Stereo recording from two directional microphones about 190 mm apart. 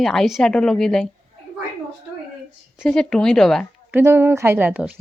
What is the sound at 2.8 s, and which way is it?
Speech, 5° left (ahead or behind).